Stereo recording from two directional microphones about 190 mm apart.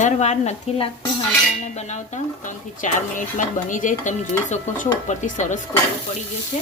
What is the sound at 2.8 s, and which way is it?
Speech, 40° left (ahead or behind).